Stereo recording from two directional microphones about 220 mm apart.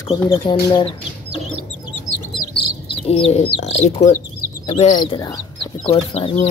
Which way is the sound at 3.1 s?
25° left (ahead or behind).